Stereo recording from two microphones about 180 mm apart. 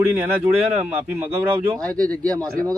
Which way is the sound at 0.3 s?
15° right (ahead or behind).